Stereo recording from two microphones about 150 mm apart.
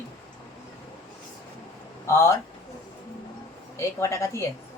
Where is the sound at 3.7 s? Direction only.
20° left (ahead or behind).